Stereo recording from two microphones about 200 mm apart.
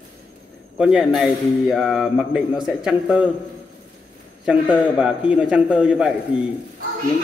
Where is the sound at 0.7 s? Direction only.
5° right (ahead or behind).